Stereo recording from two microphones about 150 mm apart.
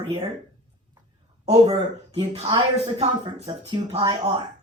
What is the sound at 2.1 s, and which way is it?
A woman's voice, 40° right (ahead or behind).